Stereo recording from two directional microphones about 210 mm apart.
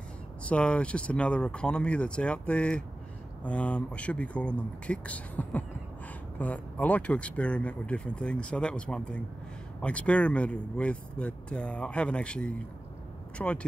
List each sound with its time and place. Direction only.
0.5 s speech: 5° left (ahead or behind)